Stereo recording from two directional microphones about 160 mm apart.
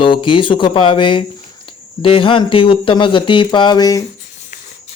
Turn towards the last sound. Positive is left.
turn(degrees=25)  # may be behind; listen again after turning